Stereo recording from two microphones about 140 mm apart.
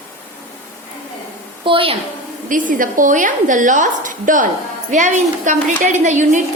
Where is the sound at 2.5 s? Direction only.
75° right (ahead or behind).